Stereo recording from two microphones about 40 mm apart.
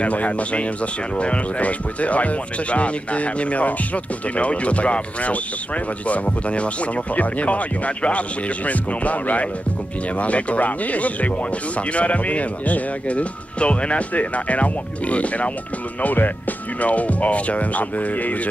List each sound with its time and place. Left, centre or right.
0.0 s speech: left
16.0 s speech: left